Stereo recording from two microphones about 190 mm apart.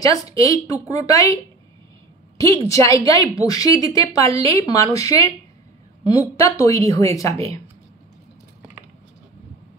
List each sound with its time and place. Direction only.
0.0 s a woman's voice: 20° left (ahead or behind)